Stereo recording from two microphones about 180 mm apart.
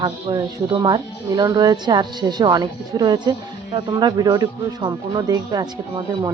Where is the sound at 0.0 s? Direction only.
25° right (ahead or behind).